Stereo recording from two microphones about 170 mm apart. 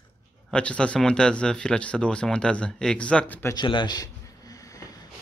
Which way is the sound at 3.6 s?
25° left (ahead or behind).